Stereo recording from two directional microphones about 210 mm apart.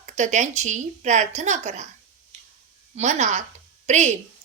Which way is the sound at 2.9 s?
35° right (ahead or behind).